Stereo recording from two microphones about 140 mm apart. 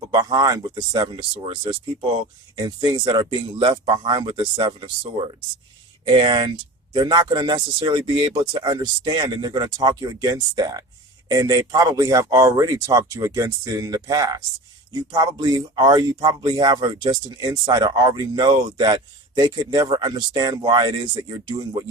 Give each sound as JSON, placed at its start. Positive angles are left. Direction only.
{"t": 0.1, "sound": "speech", "side_deg": -25}